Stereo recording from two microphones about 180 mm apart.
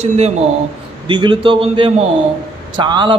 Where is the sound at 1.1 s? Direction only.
25° right (ahead or behind).